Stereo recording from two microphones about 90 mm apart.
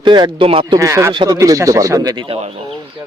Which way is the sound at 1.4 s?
35° right (ahead or behind).